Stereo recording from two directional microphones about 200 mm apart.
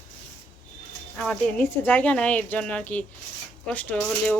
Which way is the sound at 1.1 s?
5° left (ahead or behind).